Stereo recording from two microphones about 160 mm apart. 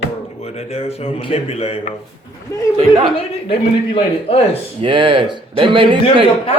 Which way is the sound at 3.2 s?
35° left (ahead or behind).